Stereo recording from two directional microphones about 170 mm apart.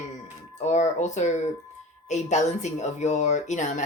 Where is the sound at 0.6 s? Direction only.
40° left (ahead or behind).